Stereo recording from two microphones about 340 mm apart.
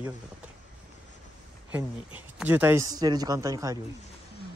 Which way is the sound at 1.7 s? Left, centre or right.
Centre.